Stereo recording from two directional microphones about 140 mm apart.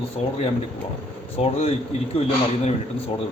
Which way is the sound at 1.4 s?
45° left (ahead or behind).